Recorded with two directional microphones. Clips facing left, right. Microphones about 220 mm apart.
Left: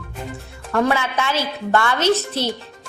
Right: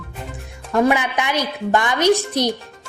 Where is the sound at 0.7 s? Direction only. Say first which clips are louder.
Right 2 dB; 15° right (ahead or behind).